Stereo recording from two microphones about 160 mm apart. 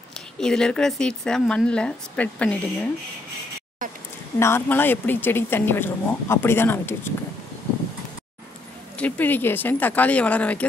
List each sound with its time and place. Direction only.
0.4 s speech: 5° left (ahead or behind)
3.8 s a sound: 60° right (ahead or behind)
4.4 s speech: 15° left (ahead or behind)
8.9 s speech: 10° left (ahead or behind)